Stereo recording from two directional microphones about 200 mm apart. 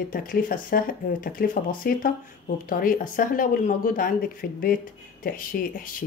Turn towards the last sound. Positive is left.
turn(degrees=45)  # may be behind; listen again after turning